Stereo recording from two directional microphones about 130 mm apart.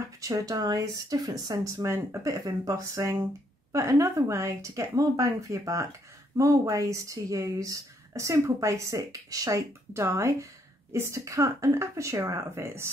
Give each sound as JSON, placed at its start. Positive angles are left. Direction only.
{"t": 0.2, "sound": "a woman's voice", "side_deg": -25}